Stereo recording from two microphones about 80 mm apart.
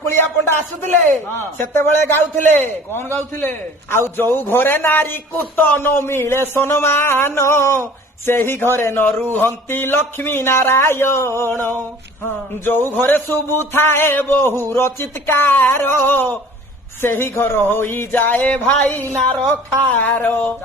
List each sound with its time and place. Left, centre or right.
0.1 s a man's voice: left
12.9 s a man's voice: left